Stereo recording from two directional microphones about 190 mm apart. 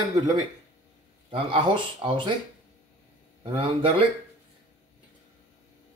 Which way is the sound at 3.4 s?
30° right (ahead or behind).